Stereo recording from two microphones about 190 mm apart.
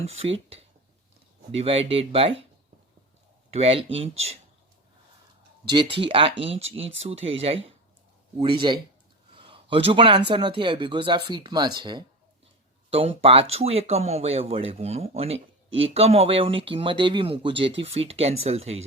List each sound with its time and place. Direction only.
0.0 s speech: 30° right (ahead or behind)
3.5 s speech: 30° right (ahead or behind)
5.6 s a man's voice: 25° right (ahead or behind)